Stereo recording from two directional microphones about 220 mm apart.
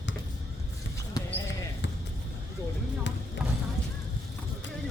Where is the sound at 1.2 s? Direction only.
15° left (ahead or behind).